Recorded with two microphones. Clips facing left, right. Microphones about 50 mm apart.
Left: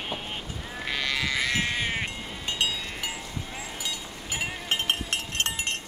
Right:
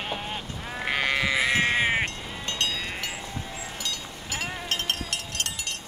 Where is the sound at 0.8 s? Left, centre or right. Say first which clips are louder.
Right 4 dB; right.